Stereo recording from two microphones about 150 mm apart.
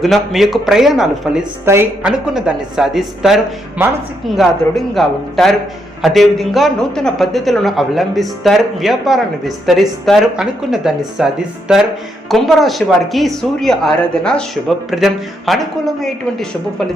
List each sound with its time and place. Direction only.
0.0 s a man's voice: centre (ahead or behind)
1.6 s a woman's voice: 15° right (ahead or behind)
2.0 s a man's voice: 5° right (ahead or behind)